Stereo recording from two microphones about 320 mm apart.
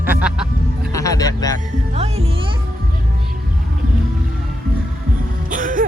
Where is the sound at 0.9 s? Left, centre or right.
Centre.